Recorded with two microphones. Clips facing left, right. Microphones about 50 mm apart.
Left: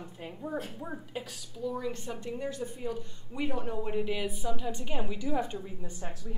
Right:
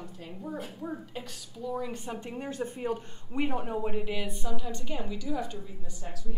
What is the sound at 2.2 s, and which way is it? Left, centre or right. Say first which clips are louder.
Speech: even; right.